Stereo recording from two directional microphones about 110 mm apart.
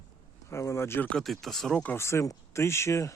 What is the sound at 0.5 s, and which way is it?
Speech, 25° left (ahead or behind).